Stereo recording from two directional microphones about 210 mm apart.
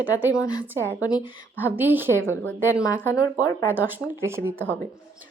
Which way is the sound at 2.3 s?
10° left (ahead or behind).